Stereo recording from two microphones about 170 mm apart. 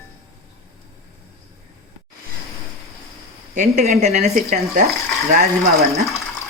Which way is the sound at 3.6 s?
50° right (ahead or behind).